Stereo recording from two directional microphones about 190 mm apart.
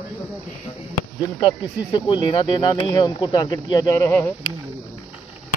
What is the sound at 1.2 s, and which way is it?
Speech, 25° left (ahead or behind).